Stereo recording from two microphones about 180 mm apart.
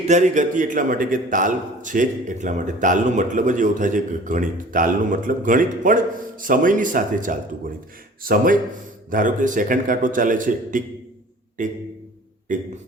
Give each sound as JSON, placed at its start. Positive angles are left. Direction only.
{"t": 0.1, "sound": "a man's voice", "side_deg": -45}